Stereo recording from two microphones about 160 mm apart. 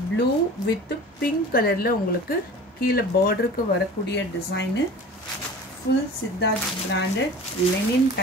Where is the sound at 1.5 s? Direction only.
70° left (ahead or behind).